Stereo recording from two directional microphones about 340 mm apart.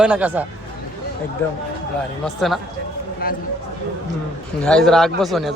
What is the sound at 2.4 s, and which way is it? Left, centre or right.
Speech, centre.